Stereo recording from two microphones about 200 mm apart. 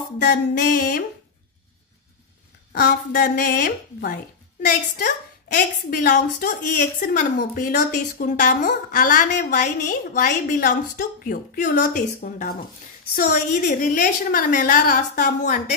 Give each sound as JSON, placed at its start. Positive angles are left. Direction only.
{"t": 0.2, "sound": "speech", "side_deg": 45}
{"t": 2.7, "sound": "speech", "side_deg": 45}
{"t": 7.0, "sound": "a woman's voice", "side_deg": 40}